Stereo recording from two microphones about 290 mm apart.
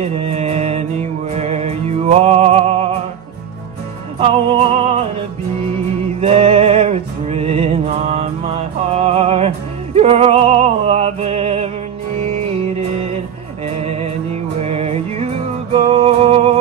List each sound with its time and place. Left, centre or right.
0.0 s music: right
4.2 s music: centre
6.2 s music: centre
13.7 s music: right